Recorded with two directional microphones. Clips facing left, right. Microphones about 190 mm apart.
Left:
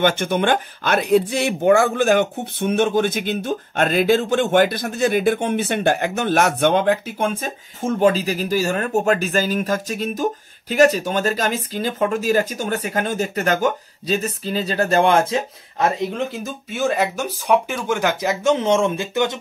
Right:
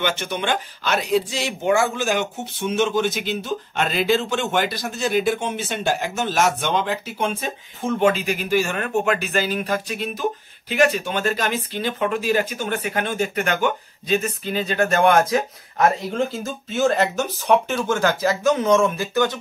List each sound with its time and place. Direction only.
0.0 s speech: 50° left (ahead or behind); by 15.9 s 25° left (ahead or behind)
16.7 s speech: 10° left (ahead or behind)